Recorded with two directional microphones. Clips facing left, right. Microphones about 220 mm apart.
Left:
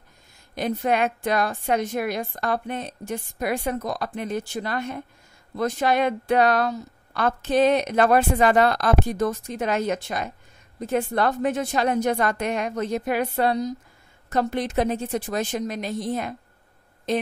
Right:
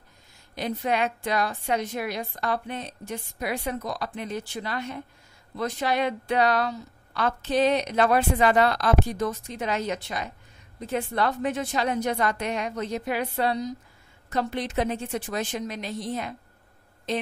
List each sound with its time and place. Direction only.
0.6 s a woman's voice: 50° left (ahead or behind)